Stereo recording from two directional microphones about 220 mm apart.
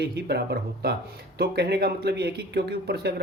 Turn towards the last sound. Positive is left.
turn(degrees=-50)  # may be behind; listen again after turning